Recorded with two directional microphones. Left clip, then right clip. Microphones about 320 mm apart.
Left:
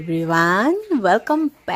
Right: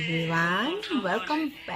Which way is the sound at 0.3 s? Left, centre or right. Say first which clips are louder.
Left 11 dB; left.